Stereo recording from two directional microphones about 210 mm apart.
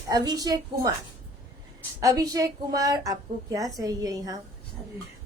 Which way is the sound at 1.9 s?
15° right (ahead or behind).